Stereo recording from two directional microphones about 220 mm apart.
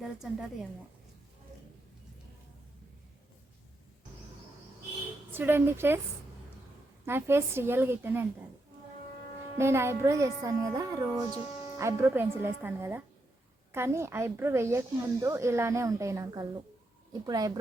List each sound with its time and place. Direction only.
0.0 s a woman's voice: centre (ahead or behind)
5.3 s speech: 10° right (ahead or behind)
7.0 s speech: 10° right (ahead or behind)
9.6 s speech: 10° right (ahead or behind)